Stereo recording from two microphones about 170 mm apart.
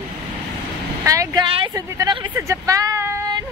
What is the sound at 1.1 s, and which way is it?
A woman's voice, 20° right (ahead or behind).